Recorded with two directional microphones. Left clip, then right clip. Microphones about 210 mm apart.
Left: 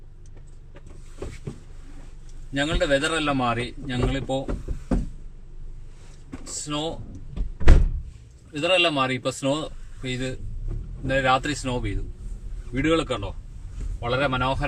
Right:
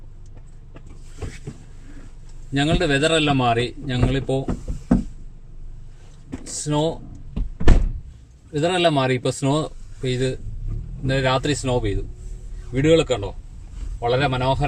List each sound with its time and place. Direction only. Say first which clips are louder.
2.5 s a man's voice: right 2 dB; 25° right (ahead or behind)
6.5 s music: right 7 dB; 25° right (ahead or behind)
8.5 s a man's voice: right 2 dB; 25° right (ahead or behind)